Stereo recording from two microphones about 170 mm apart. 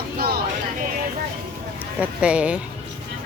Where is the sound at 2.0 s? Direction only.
5° right (ahead or behind).